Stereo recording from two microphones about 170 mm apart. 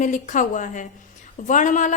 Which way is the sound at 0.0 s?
45° left (ahead or behind).